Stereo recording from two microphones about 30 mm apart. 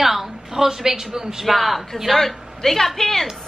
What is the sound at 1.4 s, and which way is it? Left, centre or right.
A man's voice, centre.